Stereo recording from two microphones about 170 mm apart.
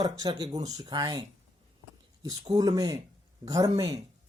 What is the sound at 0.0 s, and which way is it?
Speech, 20° right (ahead or behind).